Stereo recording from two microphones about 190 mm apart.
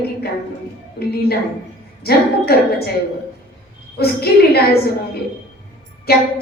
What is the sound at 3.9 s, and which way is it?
Speech, 55° left (ahead or behind).